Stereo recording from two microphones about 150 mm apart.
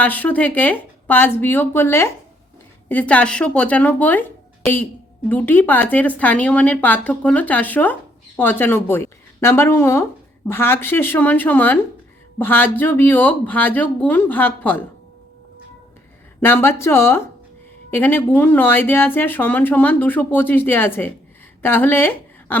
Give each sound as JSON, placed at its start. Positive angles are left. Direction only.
{"t": 0.0, "sound": "a woman's voice", "side_deg": 10}
{"t": 5.3, "sound": "a woman's voice", "side_deg": 10}
{"t": 16.4, "sound": "a woman's voice", "side_deg": 15}